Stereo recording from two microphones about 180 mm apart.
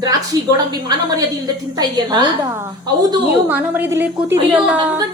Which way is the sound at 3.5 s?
10° right (ahead or behind).